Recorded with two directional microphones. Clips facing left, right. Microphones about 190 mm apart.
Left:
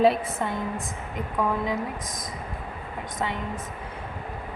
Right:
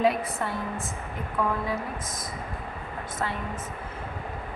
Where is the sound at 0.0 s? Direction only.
30° left (ahead or behind).